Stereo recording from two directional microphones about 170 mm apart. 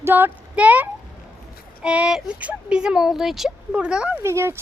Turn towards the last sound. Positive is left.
turn(degrees=-15)  # may be behind; listen again after turning